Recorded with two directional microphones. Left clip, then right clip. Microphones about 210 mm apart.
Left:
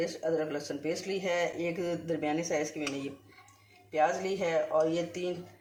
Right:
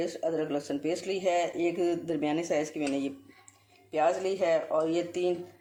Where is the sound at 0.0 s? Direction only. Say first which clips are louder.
Right 1 dB; 45° right (ahead or behind).